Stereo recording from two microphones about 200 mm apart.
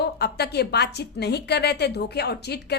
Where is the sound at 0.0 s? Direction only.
55° left (ahead or behind).